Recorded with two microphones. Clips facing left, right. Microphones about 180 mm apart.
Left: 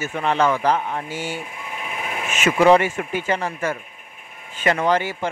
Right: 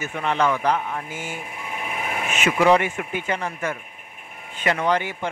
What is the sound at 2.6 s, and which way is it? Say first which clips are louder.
Speech: left 4 dB; 40° left (ahead or behind).